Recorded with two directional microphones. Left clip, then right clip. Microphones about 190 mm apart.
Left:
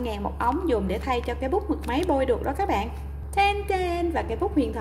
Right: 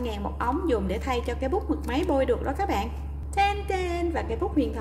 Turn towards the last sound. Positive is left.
turn(degrees=10)  # may be behind; listen again after turning